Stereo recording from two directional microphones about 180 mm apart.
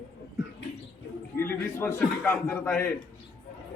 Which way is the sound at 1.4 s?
10° left (ahead or behind).